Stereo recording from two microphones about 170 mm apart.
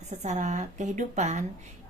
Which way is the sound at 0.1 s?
45° right (ahead or behind).